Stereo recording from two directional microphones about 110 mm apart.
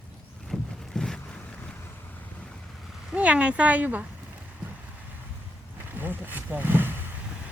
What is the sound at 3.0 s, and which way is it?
Speech, 10° right (ahead or behind).